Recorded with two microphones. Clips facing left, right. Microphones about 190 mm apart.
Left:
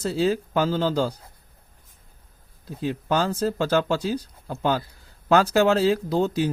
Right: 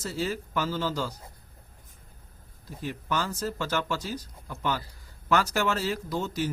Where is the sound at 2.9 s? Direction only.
60° left (ahead or behind).